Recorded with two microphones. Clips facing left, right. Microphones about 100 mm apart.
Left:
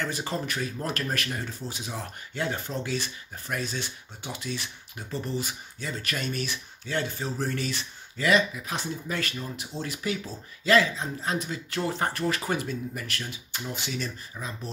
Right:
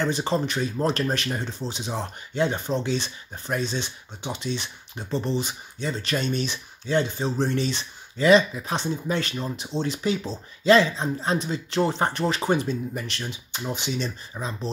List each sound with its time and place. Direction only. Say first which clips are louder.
0.0 s speech: right 7 dB; 25° right (ahead or behind)